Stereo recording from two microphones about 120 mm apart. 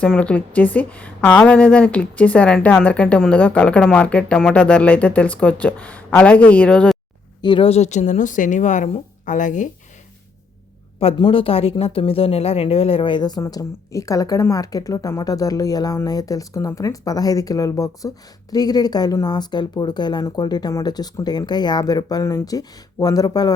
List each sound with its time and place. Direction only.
0.0 s a woman's voice: 10° left (ahead or behind)
7.4 s speech: 40° left (ahead or behind)
7.7 s a woman's voice: 70° left (ahead or behind); by 9.6 s 90° left
11.2 s speech: 50° left (ahead or behind); by 23.6 s 30° left (ahead or behind)